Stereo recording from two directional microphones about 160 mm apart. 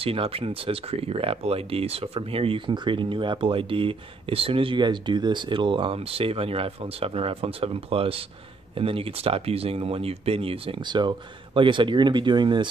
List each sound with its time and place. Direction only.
0.0 s speech: 35° right (ahead or behind)